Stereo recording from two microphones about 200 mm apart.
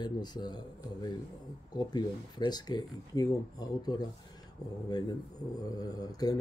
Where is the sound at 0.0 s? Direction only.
20° left (ahead or behind).